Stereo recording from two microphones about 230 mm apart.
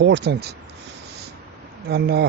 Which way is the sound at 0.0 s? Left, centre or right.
Right.